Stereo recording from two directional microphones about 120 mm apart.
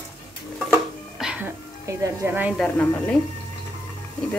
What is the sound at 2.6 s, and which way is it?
Speech, 10° left (ahead or behind).